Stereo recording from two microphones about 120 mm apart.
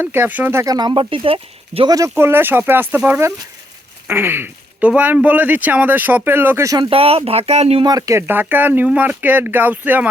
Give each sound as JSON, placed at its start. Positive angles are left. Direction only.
{"t": 0.0, "sound": "speech", "side_deg": -15}
{"t": 0.6, "sound": "speech", "side_deg": -35}
{"t": 2.1, "sound": "speech", "side_deg": -20}
{"t": 6.7, "sound": "speech", "side_deg": -40}
{"t": 7.8, "sound": "speech", "side_deg": -35}